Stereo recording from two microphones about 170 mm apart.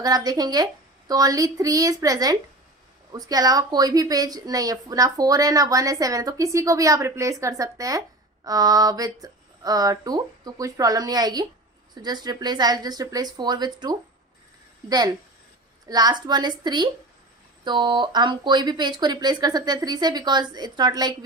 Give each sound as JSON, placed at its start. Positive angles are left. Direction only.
{"t": 0.0, "sound": "speech", "side_deg": -20}